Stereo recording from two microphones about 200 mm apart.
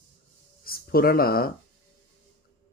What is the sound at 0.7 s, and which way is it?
Speech, 50° left (ahead or behind).